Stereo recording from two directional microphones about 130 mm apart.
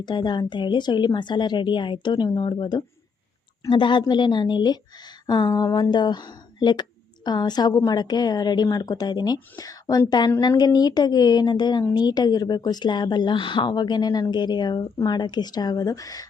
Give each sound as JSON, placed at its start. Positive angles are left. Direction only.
{"t": 0.0, "sound": "a woman's voice", "side_deg": 35}